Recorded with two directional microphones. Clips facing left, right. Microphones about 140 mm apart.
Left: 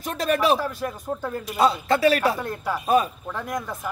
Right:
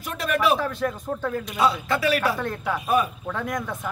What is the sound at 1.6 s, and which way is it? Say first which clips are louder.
Speech: left 4 dB; 35° left (ahead or behind).